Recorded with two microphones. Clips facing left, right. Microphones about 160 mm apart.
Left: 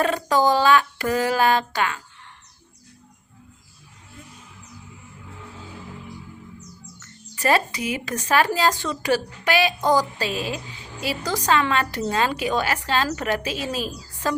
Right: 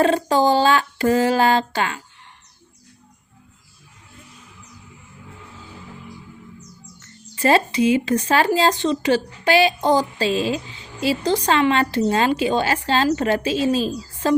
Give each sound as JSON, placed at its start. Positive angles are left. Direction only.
{"t": 0.0, "sound": "speech", "side_deg": -30}
{"t": 7.3, "sound": "speech", "side_deg": -25}